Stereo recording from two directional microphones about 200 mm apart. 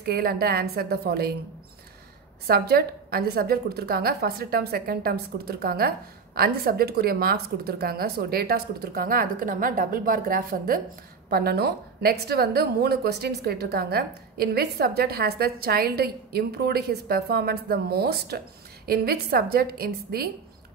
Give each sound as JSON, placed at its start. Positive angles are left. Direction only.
{"t": 0.0, "sound": "a woman's voice", "side_deg": -50}
{"t": 2.4, "sound": "a woman's voice", "side_deg": -50}